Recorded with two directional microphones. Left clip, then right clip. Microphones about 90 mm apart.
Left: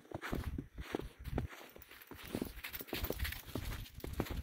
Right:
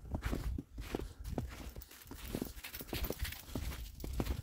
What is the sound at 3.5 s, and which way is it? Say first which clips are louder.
Clip-clop: even; 5° left (ahead or behind).